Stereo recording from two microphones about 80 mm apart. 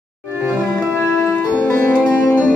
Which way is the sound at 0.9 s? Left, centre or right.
Left.